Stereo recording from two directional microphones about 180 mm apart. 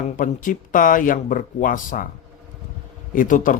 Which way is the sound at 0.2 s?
50° left (ahead or behind).